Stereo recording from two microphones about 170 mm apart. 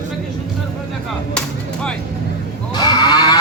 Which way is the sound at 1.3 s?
5° left (ahead or behind).